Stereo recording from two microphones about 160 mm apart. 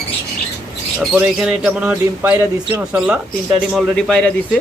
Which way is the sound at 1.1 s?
5° right (ahead or behind).